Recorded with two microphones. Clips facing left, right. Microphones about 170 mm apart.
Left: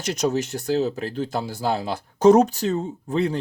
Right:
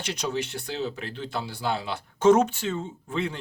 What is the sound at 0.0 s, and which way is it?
Speech, 45° left (ahead or behind).